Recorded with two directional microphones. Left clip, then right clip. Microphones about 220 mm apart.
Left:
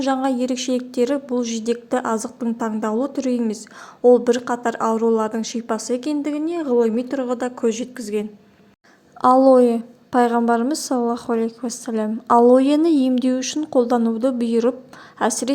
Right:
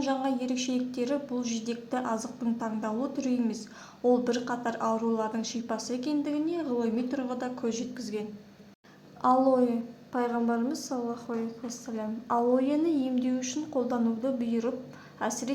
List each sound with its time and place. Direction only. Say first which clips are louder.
0.0 s a woman's voice: left 9 dB; 40° left (ahead or behind)
9.2 s a woman's voice: left 11 dB; 40° left (ahead or behind)